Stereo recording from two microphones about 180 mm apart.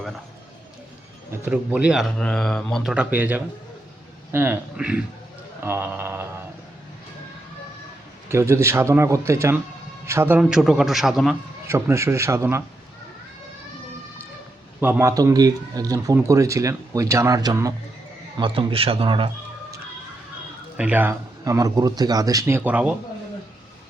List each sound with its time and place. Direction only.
1.3 s speech: 10° right (ahead or behind)
8.3 s speech: 15° right (ahead or behind)
11.7 s speech: 15° right (ahead or behind)
14.8 s a man's voice: 10° right (ahead or behind); by 19.3 s 30° right (ahead or behind)
20.7 s speech: 10° right (ahead or behind)